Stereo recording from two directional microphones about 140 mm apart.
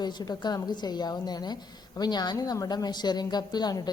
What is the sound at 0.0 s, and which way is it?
A woman's voice, 30° left (ahead or behind).